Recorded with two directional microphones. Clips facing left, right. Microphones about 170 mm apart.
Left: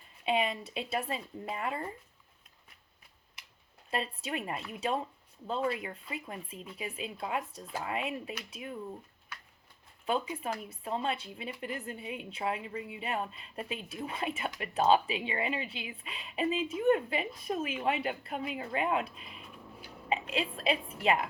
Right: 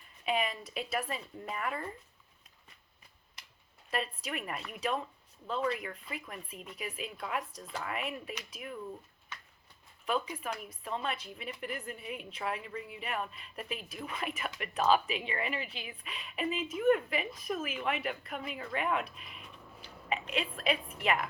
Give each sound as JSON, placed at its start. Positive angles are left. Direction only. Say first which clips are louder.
{"t": 0.3, "sound": "a woman's voice", "louder": "left 2 dB", "side_deg": 30}
{"t": 3.8, "sound": "a woman's voice", "louder": "left 1 dB", "side_deg": 30}
{"t": 10.1, "sound": "a woman's voice", "louder": "left 2 dB", "side_deg": 30}